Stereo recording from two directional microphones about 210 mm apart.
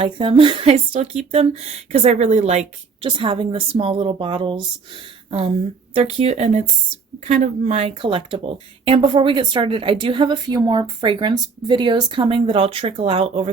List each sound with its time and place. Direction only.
0.0 s speech: 25° right (ahead or behind)
5.9 s speech: 30° right (ahead or behind)